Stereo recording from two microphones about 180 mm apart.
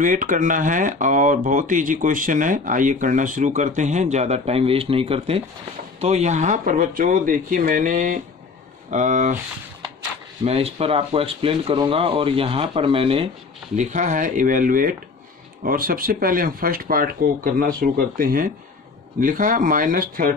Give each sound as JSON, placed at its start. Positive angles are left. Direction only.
{"t": 0.0, "sound": "speech", "side_deg": -45}
{"t": 10.4, "sound": "speech", "side_deg": -35}
{"t": 13.7, "sound": "speech", "side_deg": -45}